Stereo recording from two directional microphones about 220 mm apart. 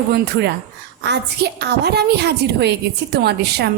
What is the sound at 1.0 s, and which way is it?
A woman's voice, 50° right (ahead or behind).